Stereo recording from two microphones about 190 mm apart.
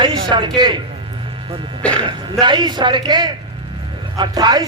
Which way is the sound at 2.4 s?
25° right (ahead or behind).